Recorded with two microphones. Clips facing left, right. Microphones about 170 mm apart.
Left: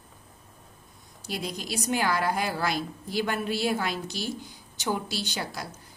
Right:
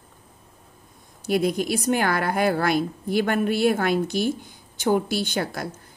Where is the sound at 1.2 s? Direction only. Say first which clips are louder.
Right 12 dB; 55° right (ahead or behind).